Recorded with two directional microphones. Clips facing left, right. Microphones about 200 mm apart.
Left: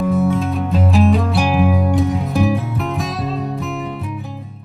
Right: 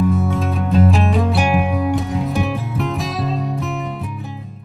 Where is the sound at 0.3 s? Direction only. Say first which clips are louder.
Right 1 dB; centre (ahead or behind).